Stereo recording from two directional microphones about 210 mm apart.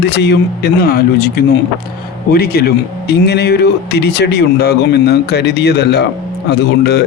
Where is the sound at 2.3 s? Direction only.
50° left (ahead or behind).